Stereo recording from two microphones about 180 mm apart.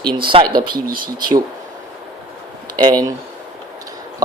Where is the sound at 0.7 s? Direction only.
55° right (ahead or behind).